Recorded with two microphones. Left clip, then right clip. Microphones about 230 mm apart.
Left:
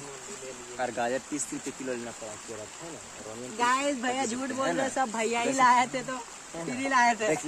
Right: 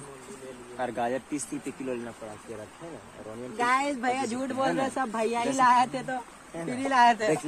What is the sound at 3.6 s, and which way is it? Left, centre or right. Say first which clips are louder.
Speech: right 1 dB; centre.